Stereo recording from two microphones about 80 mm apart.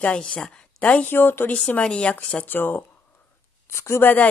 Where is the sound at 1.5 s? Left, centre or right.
Centre; by 4.1 s left.